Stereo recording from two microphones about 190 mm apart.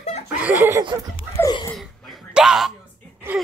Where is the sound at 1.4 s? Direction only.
20° left (ahead or behind).